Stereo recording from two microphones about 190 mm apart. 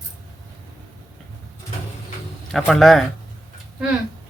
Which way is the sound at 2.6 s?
Centre (ahead or behind).